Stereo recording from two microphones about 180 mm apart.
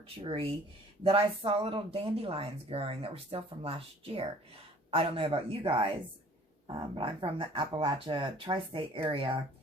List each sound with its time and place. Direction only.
0.2 s speech: 30° right (ahead or behind)